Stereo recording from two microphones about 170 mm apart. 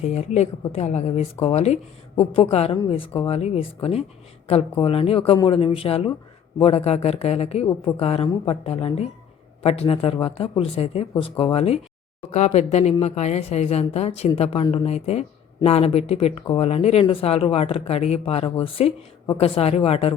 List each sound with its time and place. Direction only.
0.0 s speech: 40° left (ahead or behind)
2.7 s speech: 25° left (ahead or behind)
3.2 s speech: 35° left (ahead or behind)